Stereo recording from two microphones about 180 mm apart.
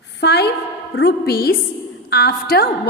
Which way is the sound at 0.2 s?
65° left (ahead or behind).